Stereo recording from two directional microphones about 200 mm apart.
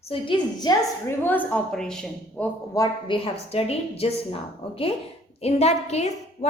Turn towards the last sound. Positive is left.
turn(degrees=35)  # may be behind; listen again after turning